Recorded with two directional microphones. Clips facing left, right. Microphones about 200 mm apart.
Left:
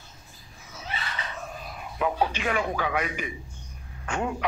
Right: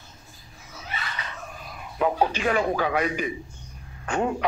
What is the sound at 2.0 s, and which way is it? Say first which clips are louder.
A man's voice: right 3 dB; 35° right (ahead or behind).